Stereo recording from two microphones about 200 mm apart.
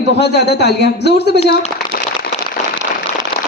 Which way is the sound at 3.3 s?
25° left (ahead or behind).